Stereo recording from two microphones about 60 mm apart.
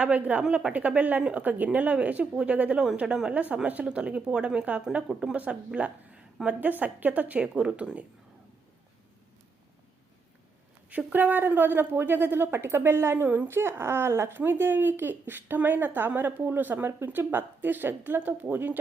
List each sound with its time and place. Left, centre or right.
0.0 s speech: right
0.4 s a woman's voice: centre
3.0 s speech: centre
3.5 s speech: centre
10.8 s a woman's voice: right